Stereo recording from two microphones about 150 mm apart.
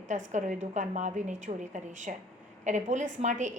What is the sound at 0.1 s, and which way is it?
A woman's voice, 55° right (ahead or behind).